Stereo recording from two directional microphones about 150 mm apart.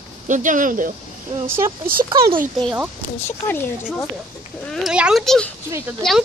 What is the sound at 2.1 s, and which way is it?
Speech, 35° right (ahead or behind).